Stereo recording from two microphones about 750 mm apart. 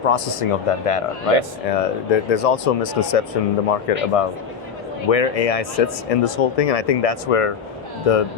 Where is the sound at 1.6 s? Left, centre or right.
Left.